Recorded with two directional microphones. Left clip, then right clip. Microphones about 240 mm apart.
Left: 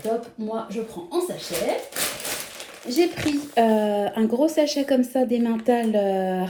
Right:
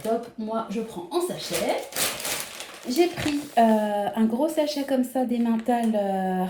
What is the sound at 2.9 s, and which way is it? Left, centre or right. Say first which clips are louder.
Speech: left 1 dB; left.